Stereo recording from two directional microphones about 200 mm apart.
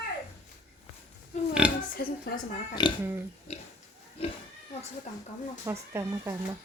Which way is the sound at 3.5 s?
35° left (ahead or behind).